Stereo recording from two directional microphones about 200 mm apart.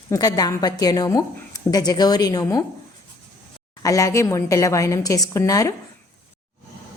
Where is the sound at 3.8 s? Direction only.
15° left (ahead or behind).